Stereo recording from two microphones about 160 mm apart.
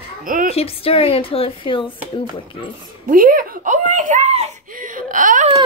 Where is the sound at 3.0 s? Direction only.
60° right (ahead or behind); by 4.5 s 45° right (ahead or behind).